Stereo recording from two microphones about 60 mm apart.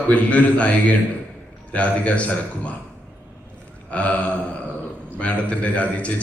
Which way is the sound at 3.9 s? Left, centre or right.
Left.